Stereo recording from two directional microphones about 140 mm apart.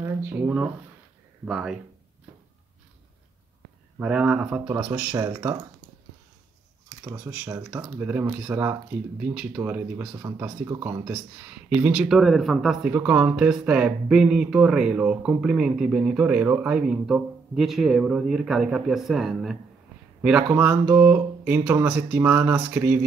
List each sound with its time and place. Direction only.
0.0 s speech: 15° right (ahead or behind)
4.0 s speech: 5° right (ahead or behind)
7.1 s speech: 15° right (ahead or behind)